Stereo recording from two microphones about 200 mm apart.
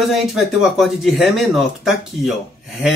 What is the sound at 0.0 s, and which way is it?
Speech, centre (ahead or behind).